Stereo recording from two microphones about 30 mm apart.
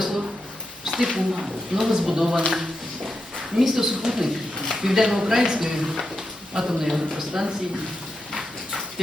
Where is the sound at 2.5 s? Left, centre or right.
Centre.